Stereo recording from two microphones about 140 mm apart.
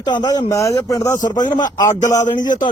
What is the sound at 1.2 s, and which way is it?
Speech, 65° left (ahead or behind).